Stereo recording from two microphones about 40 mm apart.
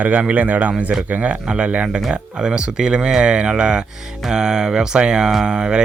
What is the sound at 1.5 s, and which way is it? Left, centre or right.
Speech, right.